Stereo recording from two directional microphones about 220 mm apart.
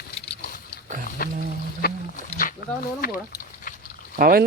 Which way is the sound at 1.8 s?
40° left (ahead or behind).